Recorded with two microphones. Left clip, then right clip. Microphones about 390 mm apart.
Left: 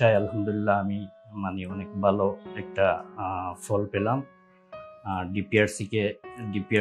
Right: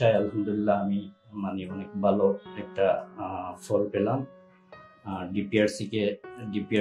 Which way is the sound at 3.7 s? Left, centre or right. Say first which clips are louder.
Right 2 dB; left.